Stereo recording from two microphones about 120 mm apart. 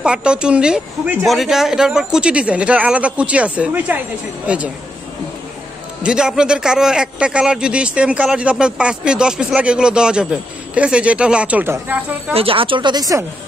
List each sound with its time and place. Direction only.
0.0 s a man's voice: 10° right (ahead or behind)
6.0 s a man's voice: 5° right (ahead or behind)
12.4 s speech: 50° right (ahead or behind); by 13.2 s 30° right (ahead or behind)